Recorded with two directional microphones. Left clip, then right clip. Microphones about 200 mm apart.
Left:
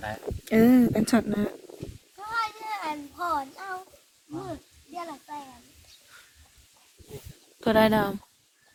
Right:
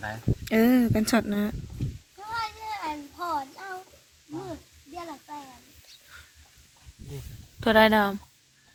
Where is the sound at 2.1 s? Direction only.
10° left (ahead or behind).